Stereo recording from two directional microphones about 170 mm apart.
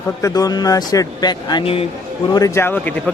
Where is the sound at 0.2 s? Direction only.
20° left (ahead or behind).